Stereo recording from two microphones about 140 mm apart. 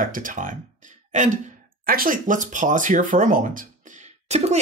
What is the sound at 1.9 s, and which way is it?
Speech, 85° right.